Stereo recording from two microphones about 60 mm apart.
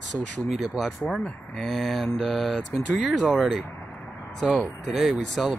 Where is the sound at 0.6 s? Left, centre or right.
Centre.